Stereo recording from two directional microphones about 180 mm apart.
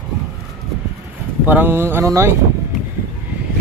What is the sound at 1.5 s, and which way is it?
Speech, 10° right (ahead or behind).